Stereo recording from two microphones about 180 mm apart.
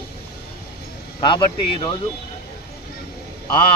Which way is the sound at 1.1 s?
25° left (ahead or behind).